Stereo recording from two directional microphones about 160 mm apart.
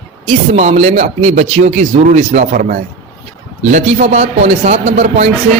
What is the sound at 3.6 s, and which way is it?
A man's voice, 45° right (ahead or behind).